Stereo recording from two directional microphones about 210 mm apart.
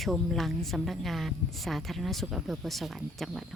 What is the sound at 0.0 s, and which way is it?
Speech, centre (ahead or behind).